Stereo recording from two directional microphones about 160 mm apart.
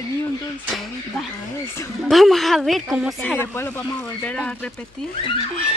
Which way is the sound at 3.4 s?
15° left (ahead or behind).